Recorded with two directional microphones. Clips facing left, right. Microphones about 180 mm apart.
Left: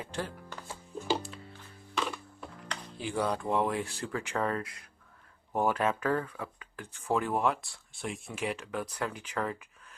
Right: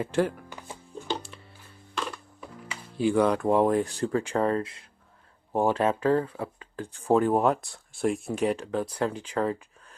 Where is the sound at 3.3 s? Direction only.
45° right (ahead or behind).